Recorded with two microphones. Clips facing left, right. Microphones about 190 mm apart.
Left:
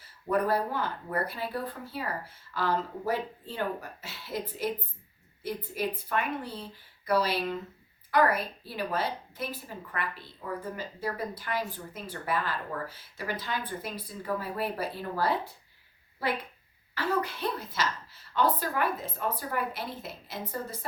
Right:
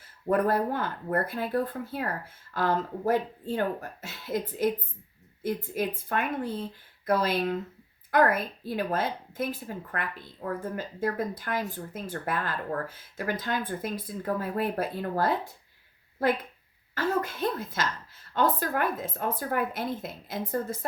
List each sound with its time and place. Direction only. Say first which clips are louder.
0.3 s a woman's voice: right 3 dB; 50° right (ahead or behind)